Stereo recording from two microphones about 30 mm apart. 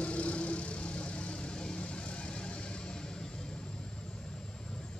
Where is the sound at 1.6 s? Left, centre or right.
Left.